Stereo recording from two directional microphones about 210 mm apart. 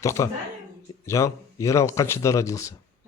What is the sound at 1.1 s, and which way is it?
Speech, 15° left (ahead or behind).